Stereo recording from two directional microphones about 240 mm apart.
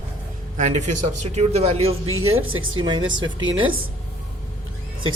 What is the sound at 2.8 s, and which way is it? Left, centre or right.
Speech, centre.